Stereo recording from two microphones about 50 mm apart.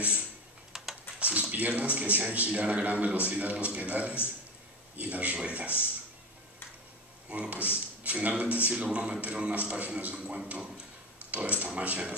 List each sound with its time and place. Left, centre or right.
0.7 s typing: centre
1.2 s speech: right
7.2 s speech: right